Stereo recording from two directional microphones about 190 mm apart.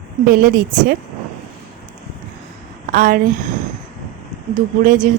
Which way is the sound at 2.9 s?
45° right (ahead or behind).